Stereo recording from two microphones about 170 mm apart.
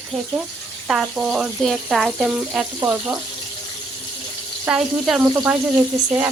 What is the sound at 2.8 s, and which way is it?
Speech, 15° right (ahead or behind).